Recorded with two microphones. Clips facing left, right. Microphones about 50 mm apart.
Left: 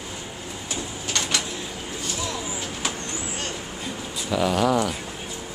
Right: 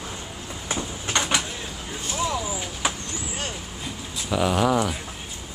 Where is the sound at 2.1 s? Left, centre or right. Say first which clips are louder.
Right 6 dB; right.